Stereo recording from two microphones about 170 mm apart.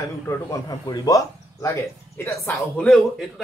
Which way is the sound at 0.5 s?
20° left (ahead or behind).